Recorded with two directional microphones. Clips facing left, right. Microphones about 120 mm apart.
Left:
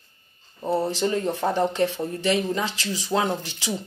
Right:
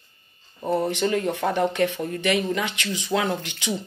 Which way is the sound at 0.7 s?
30° left (ahead or behind).